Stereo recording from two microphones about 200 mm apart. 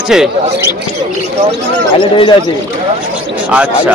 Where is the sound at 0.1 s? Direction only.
5° right (ahead or behind).